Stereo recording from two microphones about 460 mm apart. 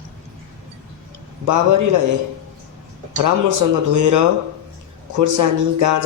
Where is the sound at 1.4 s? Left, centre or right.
Right.